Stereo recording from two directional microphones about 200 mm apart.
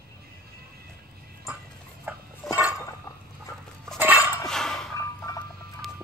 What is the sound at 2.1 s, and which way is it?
Dog, 10° right (ahead or behind).